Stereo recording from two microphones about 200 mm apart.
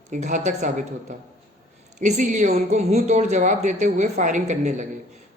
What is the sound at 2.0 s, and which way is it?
A woman's voice, 40° right (ahead or behind).